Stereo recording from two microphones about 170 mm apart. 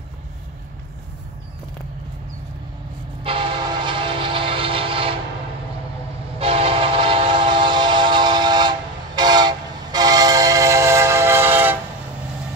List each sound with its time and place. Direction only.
3.3 s train: 30° right (ahead or behind)
6.4 s train: 35° right (ahead or behind); by 11.8 s 10° right (ahead or behind)